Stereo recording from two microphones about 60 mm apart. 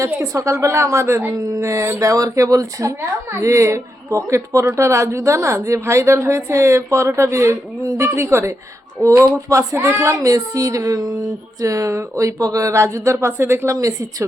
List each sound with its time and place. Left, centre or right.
0.0 s a woman's voice: right
13.7 s a woman's voice: right